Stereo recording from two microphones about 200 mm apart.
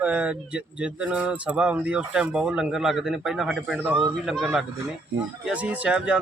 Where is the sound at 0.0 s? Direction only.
5° right (ahead or behind).